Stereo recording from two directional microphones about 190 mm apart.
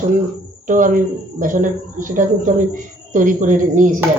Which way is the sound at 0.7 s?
45° right (ahead or behind).